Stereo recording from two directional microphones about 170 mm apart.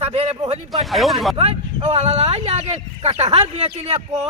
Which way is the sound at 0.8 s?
Centre (ahead or behind).